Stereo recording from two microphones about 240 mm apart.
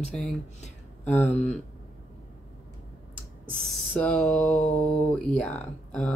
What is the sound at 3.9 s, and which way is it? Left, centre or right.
Speech, centre.